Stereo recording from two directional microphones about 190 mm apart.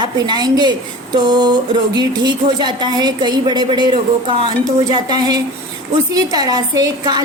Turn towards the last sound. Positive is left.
turn(degrees=-20)  # may be behind; listen again after turning